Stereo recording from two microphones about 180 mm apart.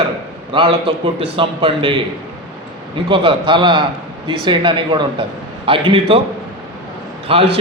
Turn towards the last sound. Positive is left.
turn(degrees=-30)  # may be behind; listen again after turning